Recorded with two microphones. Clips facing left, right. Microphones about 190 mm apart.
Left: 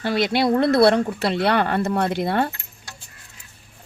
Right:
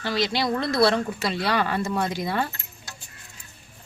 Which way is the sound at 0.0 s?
55° left (ahead or behind).